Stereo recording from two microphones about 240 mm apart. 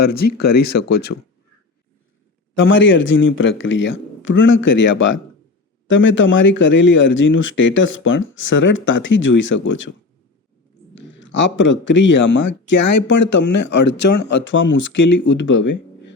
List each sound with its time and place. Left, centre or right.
0.0 s speech: left
2.6 s speech: left
11.1 s speech: left